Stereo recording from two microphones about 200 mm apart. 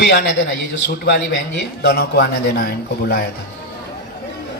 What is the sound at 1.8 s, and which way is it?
A man's voice, 55° left (ahead or behind).